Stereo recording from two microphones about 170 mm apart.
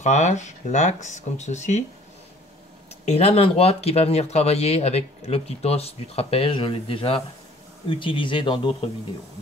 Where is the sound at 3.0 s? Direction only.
40° left (ahead or behind).